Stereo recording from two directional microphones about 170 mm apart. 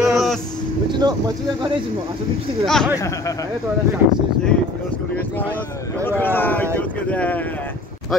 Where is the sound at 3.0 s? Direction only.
20° left (ahead or behind).